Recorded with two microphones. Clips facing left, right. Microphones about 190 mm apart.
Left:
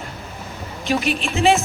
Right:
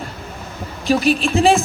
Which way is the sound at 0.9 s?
35° right (ahead or behind).